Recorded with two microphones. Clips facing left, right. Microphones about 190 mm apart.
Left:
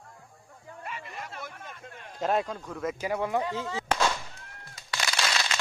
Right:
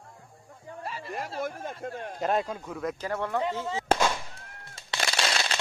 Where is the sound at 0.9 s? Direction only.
35° right (ahead or behind).